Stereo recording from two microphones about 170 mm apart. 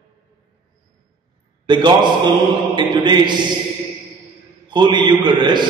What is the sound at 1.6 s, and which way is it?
A man's voice, 25° right (ahead or behind).